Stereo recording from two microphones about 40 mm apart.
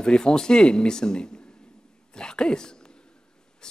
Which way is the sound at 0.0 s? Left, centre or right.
Centre.